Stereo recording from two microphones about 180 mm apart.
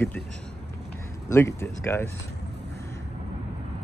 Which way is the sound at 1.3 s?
15° left (ahead or behind).